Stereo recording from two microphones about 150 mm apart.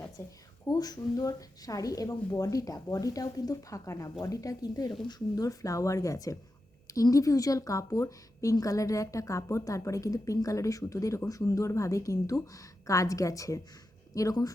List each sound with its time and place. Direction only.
0.2 s a woman's voice: 20° left (ahead or behind)